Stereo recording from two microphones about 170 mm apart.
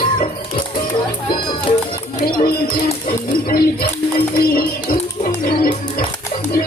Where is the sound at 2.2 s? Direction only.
65° left (ahead or behind).